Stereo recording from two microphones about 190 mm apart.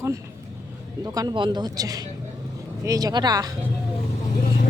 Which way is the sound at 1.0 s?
20° right (ahead or behind).